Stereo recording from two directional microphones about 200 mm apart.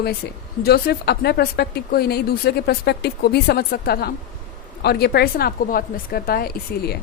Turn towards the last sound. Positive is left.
turn(degrees=50)  # may be behind; listen again after turning